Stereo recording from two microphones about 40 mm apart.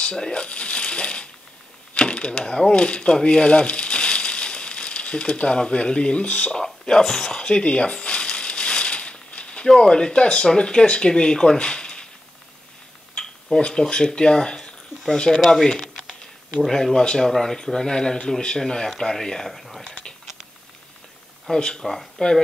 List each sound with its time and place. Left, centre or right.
0.0 s speech: centre
0.3 s speech: left
2.0 s typewriter: left
2.7 s speech: left
7.3 s crumpling: left
9.7 s speech: centre
13.7 s speech: centre
15.4 s speech: centre
21.5 s speech: centre